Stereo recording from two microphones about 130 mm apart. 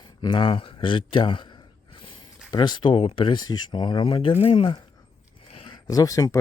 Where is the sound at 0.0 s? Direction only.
35° left (ahead or behind).